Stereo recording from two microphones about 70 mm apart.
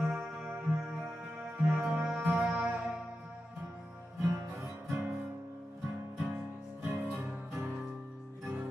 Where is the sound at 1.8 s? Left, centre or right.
Centre.